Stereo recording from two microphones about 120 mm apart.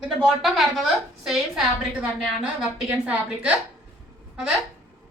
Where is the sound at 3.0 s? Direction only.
10° right (ahead or behind).